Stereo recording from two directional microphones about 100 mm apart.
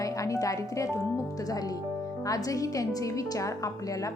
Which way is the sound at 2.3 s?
35° left (ahead or behind).